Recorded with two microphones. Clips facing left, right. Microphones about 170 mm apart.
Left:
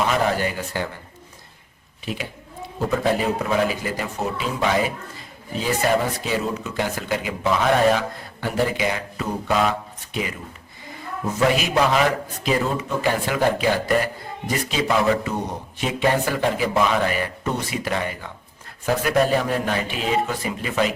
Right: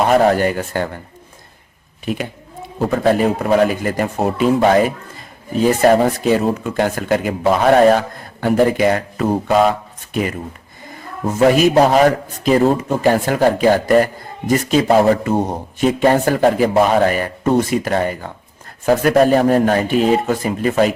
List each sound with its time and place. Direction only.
0.0 s a man's voice: 50° right (ahead or behind)
2.1 s a man's voice: 55° right (ahead or behind)
11.3 s a man's voice: 45° right (ahead or behind)